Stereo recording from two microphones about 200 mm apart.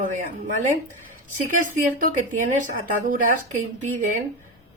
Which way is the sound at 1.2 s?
40° right (ahead or behind).